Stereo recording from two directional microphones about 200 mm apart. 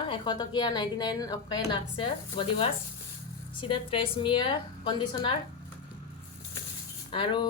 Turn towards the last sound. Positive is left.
turn(degrees=25)  # may be behind; listen again after turning